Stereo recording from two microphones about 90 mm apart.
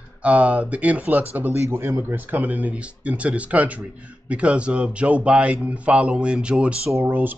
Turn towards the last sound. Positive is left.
turn(degrees=-20)  # may be behind; listen again after turning